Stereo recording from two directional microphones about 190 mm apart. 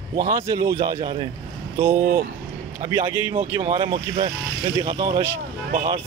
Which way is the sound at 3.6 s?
30° right (ahead or behind).